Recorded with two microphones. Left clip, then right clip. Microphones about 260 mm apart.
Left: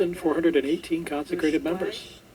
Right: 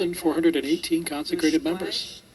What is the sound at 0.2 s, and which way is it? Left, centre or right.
Speech, right.